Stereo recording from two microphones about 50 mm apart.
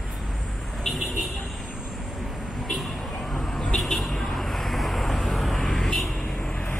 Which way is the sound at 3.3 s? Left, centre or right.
Centre.